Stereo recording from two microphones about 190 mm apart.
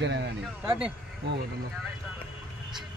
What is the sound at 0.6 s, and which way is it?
Speech, 10° right (ahead or behind).